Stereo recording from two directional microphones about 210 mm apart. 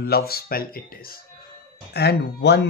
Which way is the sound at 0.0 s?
50° left (ahead or behind).